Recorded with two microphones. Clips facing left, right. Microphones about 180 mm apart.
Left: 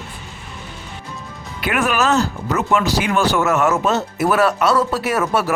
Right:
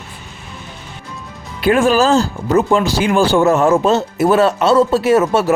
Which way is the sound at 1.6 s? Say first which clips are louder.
Right 7 dB; 30° right (ahead or behind).